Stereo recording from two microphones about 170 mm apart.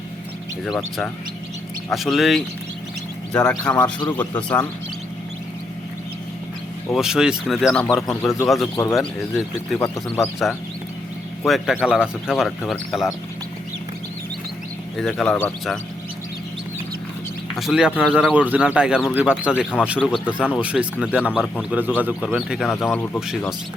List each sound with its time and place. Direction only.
1.9 s speech: centre (ahead or behind)
6.9 s speech: 5° right (ahead or behind)
8.7 s speech: 20° left (ahead or behind)
11.4 s speech: centre (ahead or behind)
14.9 s speech: 5° left (ahead or behind)
17.6 s speech: centre (ahead or behind)
22.8 s speech: 10° left (ahead or behind)